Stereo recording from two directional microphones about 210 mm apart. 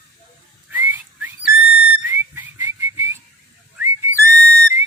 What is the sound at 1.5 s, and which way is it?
Whistle, 5° right (ahead or behind).